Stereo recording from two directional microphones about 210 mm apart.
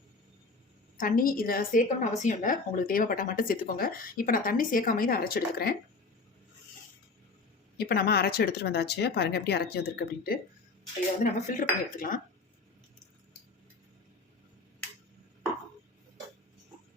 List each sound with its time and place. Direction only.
0.9 s a woman's voice: 40° left (ahead or behind)
7.8 s a woman's voice: 50° left (ahead or behind)
11.2 s speech: 35° left (ahead or behind)